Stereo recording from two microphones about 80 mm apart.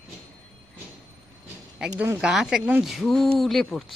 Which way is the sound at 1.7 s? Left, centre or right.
Centre.